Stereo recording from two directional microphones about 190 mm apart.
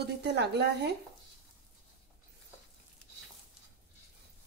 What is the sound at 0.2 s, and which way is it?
Speech, 60° right (ahead or behind).